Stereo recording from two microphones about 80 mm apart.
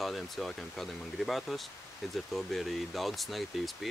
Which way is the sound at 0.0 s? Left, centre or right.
Centre.